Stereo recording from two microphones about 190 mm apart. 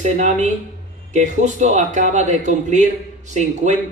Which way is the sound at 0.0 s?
40° right (ahead or behind).